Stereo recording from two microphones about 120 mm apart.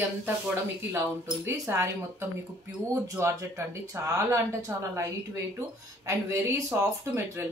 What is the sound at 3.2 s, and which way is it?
Speech, 25° right (ahead or behind).